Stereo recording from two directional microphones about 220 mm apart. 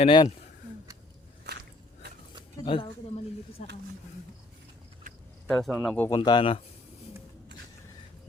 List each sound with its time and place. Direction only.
0.0 s speech: 25° left (ahead or behind)
2.6 s a sound: 25° left (ahead or behind)
5.5 s speech: 5° left (ahead or behind)
6.1 s speech: 20° left (ahead or behind)